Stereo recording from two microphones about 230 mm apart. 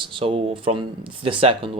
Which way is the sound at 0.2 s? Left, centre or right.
Right.